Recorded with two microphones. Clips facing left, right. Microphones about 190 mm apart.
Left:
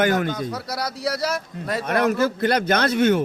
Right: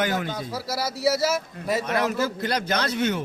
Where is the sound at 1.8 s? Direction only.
55° left (ahead or behind).